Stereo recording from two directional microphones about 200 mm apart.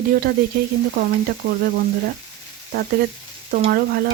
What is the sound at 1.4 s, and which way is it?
Speech, 50° right (ahead or behind).